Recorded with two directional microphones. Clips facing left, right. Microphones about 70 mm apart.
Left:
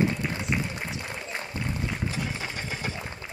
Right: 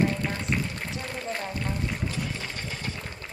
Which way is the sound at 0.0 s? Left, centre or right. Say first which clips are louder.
Even; centre.